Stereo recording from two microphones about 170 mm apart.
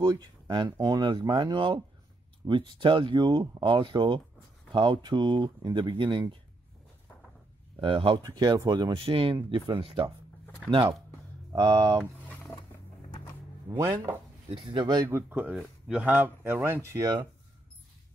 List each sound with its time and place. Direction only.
0.0 s speech: 25° right (ahead or behind)
7.8 s speech: 30° right (ahead or behind)
12.0 s a sound: 5° left (ahead or behind)
13.7 s speech: 20° right (ahead or behind)
15.0 s speech: 15° right (ahead or behind)